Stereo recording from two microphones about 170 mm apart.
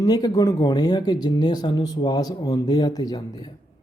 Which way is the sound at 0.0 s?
25° left (ahead or behind).